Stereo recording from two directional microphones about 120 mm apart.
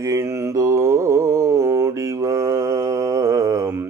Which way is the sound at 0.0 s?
25° right (ahead or behind).